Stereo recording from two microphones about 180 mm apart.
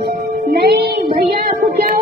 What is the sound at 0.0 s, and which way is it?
Music, 65° right (ahead or behind).